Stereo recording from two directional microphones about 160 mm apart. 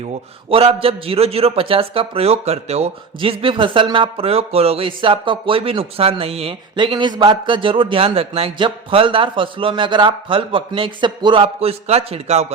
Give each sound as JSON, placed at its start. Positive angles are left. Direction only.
{"t": 0.5, "sound": "a man's voice", "side_deg": -35}